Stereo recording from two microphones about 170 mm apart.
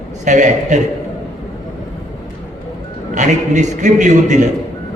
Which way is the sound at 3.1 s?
45° right (ahead or behind).